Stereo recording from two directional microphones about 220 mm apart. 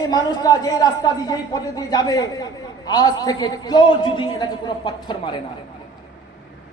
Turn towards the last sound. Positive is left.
turn(degrees=20)  # may be behind; listen again after turning